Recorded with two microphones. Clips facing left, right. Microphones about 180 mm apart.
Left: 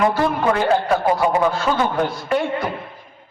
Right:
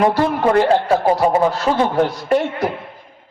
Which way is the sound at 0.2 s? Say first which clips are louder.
Right 4 dB; 30° right (ahead or behind).